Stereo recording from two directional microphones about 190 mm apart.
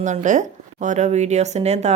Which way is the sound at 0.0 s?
40° right (ahead or behind).